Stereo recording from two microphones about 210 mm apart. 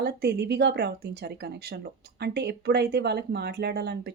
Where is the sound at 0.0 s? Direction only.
50° right (ahead or behind).